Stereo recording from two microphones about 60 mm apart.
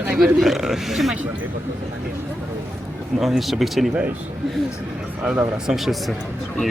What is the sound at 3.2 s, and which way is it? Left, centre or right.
Speech, centre.